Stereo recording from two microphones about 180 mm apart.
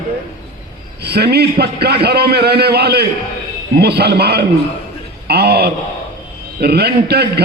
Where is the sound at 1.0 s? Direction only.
65° right (ahead or behind).